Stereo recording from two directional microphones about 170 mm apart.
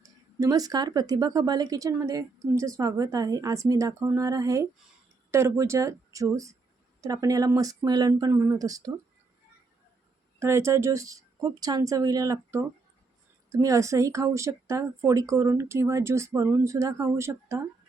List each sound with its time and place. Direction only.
0.0 s speech: 20° right (ahead or behind)
10.4 s speech: 15° right (ahead or behind)